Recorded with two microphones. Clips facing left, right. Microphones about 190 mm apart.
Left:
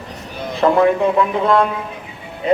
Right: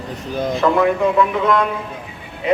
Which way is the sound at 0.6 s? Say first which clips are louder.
Left 3 dB; 35° left (ahead or behind).